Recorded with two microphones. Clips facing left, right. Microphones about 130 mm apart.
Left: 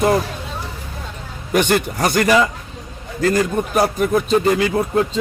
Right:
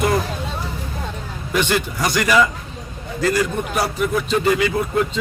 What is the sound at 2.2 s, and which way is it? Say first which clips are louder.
Speech: left 1 dB; 30° left (ahead or behind).